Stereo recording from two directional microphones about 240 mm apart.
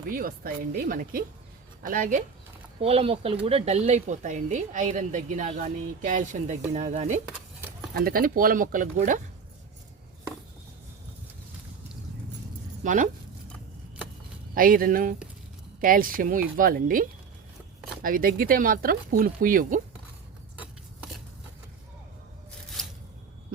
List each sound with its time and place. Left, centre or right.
0.1 s speech: right
7.3 s a sound: centre
7.9 s speech: right
12.8 s speech: right
14.5 s speech: right